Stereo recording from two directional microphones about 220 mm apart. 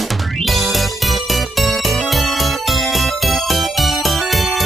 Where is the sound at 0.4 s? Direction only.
Centre (ahead or behind).